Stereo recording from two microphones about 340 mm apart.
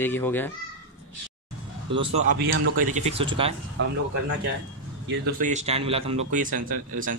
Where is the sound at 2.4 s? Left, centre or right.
Right.